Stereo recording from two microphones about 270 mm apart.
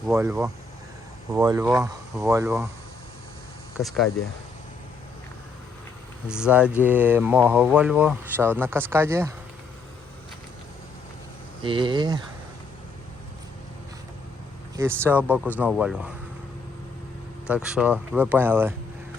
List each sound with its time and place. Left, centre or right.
0.0 s speech: centre
3.8 s speech: centre
6.2 s speech: centre
11.6 s speech: centre
14.8 s speech: centre
17.5 s speech: centre